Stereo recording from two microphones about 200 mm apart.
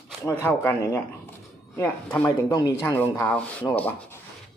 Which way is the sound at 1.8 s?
10° left (ahead or behind).